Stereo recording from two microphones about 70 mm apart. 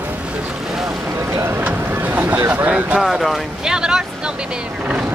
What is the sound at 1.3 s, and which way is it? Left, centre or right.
Speech, right.